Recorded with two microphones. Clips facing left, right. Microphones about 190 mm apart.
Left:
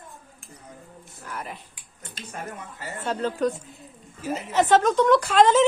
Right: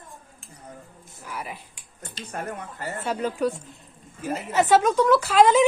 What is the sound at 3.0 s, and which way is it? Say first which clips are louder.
A woman's voice: left 1 dB; 10° right (ahead or behind).